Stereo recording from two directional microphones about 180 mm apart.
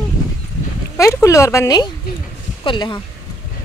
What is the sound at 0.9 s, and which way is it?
Speech, 15° left (ahead or behind).